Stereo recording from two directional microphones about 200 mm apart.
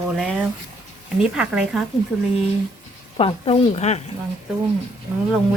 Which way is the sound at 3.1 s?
30° left (ahead or behind).